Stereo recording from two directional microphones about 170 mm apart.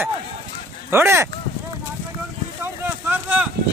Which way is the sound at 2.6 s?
10° right (ahead or behind).